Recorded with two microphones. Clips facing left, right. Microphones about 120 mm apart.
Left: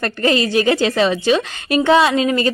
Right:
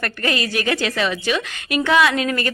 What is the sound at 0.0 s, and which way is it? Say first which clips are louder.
A woman's voice: left 6 dB; 25° left (ahead or behind).